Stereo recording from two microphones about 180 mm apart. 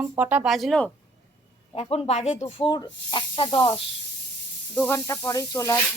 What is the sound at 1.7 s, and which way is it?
Speech, 30° left (ahead or behind).